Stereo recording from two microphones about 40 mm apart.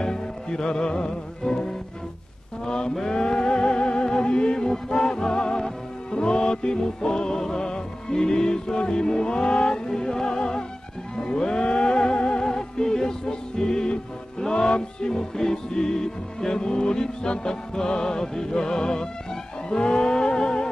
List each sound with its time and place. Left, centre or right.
0.0 s music: centre
2.6 s mantra: centre
2.9 s music: centre